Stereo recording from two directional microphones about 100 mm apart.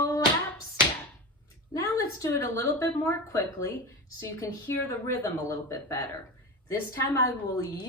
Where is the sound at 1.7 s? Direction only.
30° left (ahead or behind).